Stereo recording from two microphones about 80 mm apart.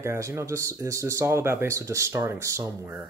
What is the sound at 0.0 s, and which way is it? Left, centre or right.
Speech, right.